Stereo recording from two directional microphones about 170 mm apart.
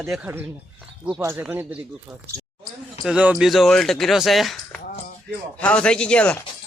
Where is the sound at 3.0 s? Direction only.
5° right (ahead or behind).